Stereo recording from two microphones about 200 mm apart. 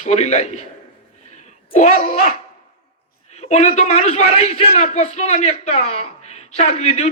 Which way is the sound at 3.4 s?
35° left (ahead or behind).